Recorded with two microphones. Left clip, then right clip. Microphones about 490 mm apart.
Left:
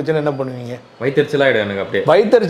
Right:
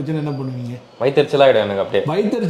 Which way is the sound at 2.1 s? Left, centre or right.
Left.